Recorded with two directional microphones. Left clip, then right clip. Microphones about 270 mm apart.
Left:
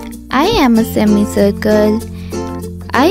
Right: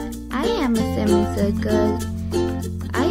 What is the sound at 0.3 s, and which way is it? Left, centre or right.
A child's voice, left.